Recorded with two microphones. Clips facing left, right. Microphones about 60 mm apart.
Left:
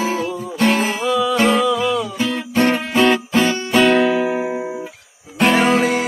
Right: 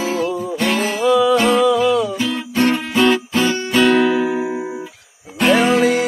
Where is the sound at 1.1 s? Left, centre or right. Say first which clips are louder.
Right 3 dB; centre.